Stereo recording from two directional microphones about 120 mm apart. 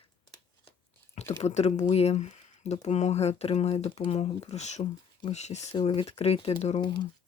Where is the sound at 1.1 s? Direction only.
70° left (ahead or behind).